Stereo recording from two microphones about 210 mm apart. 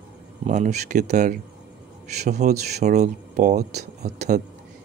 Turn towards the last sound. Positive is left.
turn(degrees=-35)  # may be behind; listen again after turning